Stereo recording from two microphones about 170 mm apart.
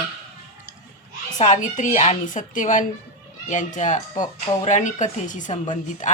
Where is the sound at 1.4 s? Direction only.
45° left (ahead or behind).